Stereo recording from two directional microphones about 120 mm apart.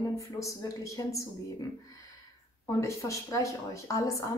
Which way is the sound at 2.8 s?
25° left (ahead or behind).